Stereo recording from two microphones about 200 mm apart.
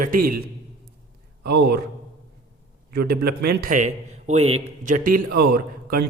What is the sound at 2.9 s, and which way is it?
A man's voice, 50° right (ahead or behind).